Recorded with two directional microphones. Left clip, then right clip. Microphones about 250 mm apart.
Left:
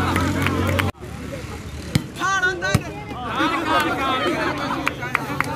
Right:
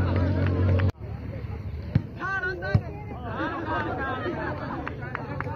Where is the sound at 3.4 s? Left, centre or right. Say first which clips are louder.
Left 10 dB; centre.